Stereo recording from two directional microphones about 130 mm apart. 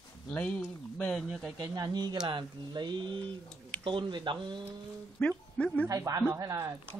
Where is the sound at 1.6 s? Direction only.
30° right (ahead or behind).